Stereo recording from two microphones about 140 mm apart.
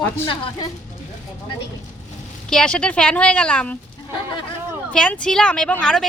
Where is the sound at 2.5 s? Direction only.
5° left (ahead or behind).